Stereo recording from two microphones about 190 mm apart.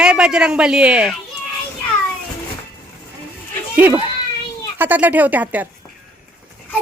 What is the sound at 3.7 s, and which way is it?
A child's voice, 10° right (ahead or behind).